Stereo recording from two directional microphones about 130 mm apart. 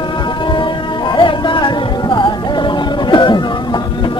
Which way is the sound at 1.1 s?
40° left (ahead or behind).